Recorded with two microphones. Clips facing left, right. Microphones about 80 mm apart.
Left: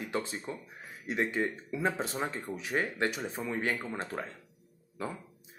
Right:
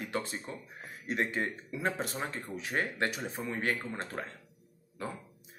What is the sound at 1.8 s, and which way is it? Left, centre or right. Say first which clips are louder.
Speech: left 2 dB; left.